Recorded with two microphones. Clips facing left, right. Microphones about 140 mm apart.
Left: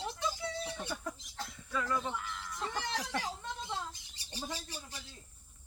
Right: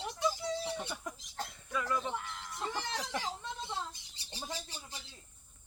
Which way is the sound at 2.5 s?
25° right (ahead or behind).